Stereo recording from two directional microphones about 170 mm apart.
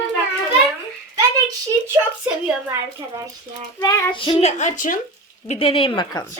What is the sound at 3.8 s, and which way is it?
A child's voice, 20° left (ahead or behind).